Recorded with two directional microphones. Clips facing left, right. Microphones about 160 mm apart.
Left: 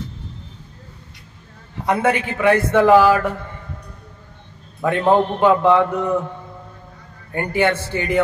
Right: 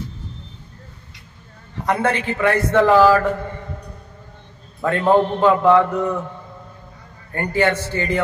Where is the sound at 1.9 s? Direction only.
15° left (ahead or behind).